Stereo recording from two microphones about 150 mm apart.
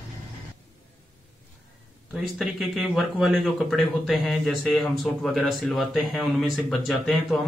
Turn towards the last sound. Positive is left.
turn(degrees=0)  # may be behind; listen again after turning